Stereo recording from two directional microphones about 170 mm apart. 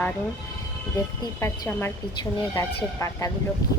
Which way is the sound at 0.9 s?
15° left (ahead or behind).